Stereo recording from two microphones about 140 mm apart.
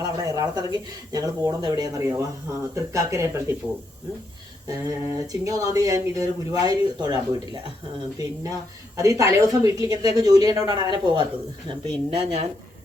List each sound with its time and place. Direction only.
0.0 s speech: 25° right (ahead or behind)
4.6 s speech: 25° right (ahead or behind)
9.0 s speech: 25° right (ahead or behind)
11.7 s speech: 45° right (ahead or behind)